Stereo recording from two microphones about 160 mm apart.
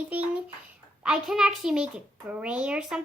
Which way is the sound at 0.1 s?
10° right (ahead or behind).